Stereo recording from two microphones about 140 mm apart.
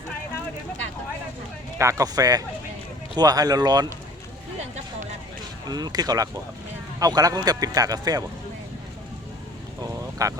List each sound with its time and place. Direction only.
1.8 s speech: 20° right (ahead or behind)
5.6 s speech: 30° right (ahead or behind)
9.8 s vehicle: 25° right (ahead or behind)